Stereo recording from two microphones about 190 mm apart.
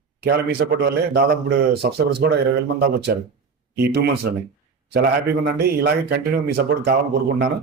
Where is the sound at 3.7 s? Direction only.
55° right (ahead or behind).